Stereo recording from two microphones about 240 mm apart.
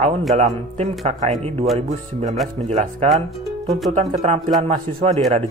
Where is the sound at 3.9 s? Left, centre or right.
Right.